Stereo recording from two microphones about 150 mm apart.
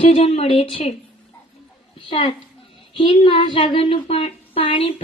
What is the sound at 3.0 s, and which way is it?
Speech, 35° left (ahead or behind).